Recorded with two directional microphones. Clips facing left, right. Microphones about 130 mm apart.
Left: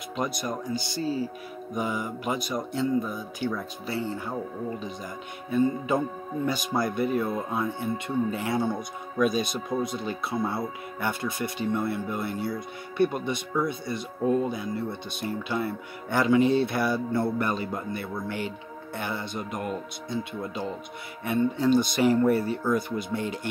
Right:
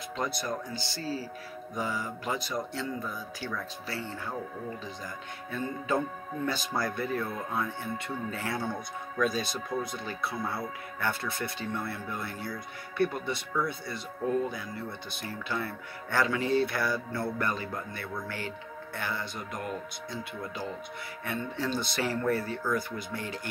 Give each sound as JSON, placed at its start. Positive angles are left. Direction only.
{"t": 0.2, "sound": "speech", "side_deg": 15}
{"t": 5.5, "sound": "speech", "side_deg": 15}